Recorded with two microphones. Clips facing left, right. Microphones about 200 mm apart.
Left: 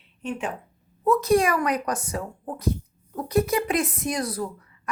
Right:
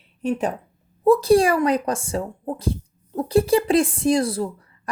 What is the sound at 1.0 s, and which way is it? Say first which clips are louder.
Speech: right 5 dB; 30° right (ahead or behind).